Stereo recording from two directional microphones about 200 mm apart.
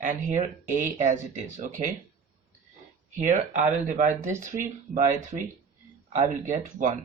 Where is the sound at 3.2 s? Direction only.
40° right (ahead or behind).